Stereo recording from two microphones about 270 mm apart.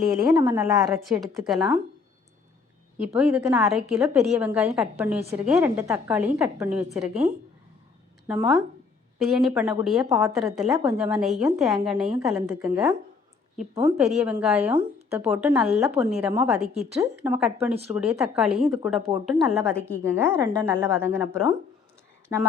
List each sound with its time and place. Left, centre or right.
0.3 s a woman's voice: centre
0.9 s a woman's voice: centre
3.0 s a woman's voice: centre
7.1 s speech: right
8.3 s a woman's voice: centre
13.6 s speech: right
13.9 s a woman's voice: centre